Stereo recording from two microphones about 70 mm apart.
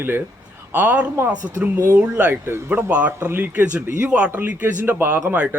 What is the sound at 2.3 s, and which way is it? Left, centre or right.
Speech, right.